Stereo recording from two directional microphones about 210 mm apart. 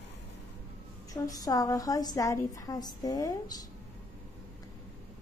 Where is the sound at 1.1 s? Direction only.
15° left (ahead or behind).